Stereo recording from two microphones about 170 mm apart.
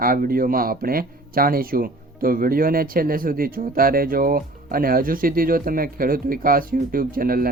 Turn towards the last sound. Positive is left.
turn(degrees=-55)  # may be behind; listen again after turning